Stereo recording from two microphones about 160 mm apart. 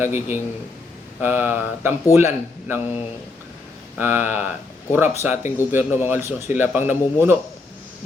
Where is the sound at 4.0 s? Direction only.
10° right (ahead or behind).